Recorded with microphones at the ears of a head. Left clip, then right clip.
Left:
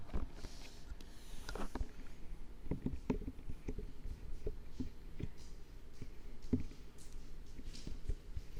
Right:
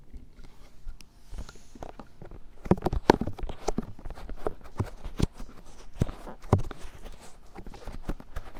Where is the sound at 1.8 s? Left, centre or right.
Right.